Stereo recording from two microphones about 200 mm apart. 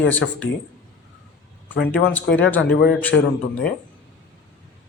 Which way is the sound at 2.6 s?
55° left (ahead or behind).